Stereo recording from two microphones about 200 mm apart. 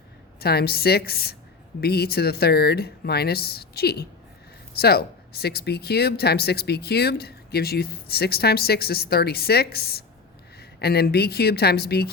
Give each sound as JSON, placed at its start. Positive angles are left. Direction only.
{"t": 0.3, "sound": "speech", "side_deg": 50}